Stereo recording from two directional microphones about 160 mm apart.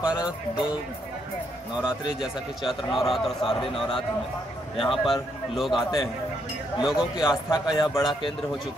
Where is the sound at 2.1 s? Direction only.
Centre (ahead or behind).